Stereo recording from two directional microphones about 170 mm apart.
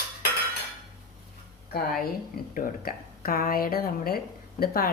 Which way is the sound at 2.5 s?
55° left (ahead or behind).